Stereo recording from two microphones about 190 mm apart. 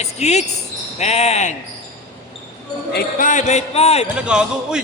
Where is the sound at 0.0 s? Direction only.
35° left (ahead or behind).